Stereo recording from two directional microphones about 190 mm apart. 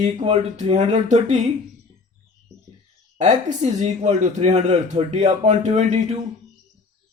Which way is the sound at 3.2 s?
40° right (ahead or behind).